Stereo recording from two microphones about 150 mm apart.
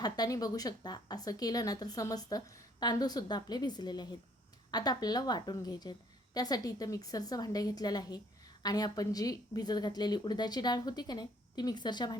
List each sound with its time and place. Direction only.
0.0 s a woman's voice: 25° left (ahead or behind)